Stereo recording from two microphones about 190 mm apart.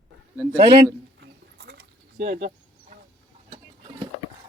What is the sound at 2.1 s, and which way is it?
Speech, 40° right (ahead or behind).